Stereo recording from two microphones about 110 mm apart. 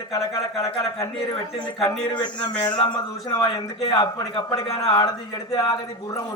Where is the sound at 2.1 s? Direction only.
40° left (ahead or behind).